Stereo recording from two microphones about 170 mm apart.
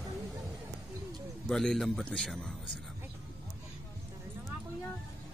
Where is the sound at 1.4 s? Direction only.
Centre (ahead or behind).